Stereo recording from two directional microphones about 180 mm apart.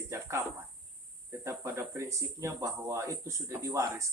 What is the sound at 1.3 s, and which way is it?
Speech, 15° right (ahead or behind).